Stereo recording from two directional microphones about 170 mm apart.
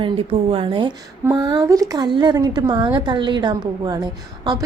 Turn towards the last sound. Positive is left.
turn(degrees=-25)  # may be behind; listen again after turning